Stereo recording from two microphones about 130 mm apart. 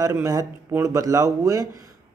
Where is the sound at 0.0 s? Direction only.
25° right (ahead or behind).